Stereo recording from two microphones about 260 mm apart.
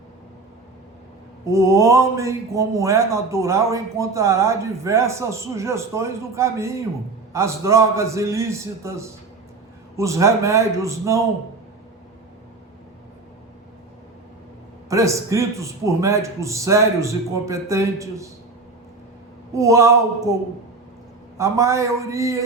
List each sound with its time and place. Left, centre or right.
1.5 s speech: centre
14.8 s speech: centre
19.5 s speech: centre